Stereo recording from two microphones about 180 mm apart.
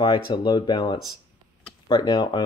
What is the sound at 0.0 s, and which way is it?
Speech, 25° left (ahead or behind).